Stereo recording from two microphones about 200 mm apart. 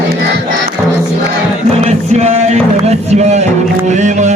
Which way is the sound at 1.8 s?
35° right (ahead or behind).